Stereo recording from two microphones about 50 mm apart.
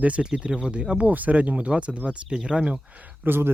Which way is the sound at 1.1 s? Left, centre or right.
Right.